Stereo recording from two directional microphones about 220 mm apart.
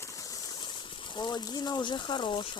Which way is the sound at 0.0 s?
15° left (ahead or behind).